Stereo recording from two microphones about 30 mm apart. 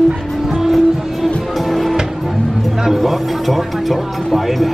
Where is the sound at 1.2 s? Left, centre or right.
Centre.